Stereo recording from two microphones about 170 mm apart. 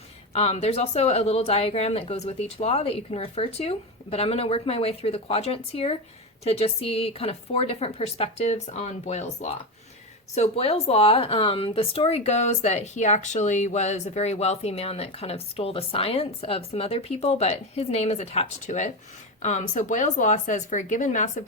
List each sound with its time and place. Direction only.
0.3 s speech: 35° left (ahead or behind)